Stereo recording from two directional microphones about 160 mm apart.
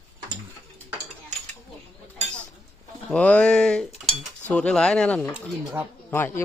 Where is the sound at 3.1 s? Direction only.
10° left (ahead or behind).